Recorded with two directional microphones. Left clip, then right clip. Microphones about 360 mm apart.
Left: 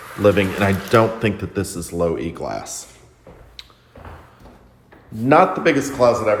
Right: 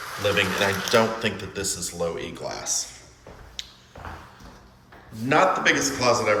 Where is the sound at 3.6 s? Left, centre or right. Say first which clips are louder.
Right 4 dB; centre.